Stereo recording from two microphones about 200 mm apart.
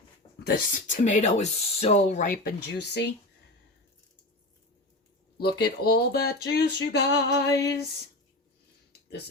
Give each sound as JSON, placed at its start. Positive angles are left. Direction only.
{"t": 0.3, "sound": "speech", "side_deg": 45}
{"t": 5.4, "sound": "speech", "side_deg": 55}
{"t": 8.9, "sound": "a sound", "side_deg": 55}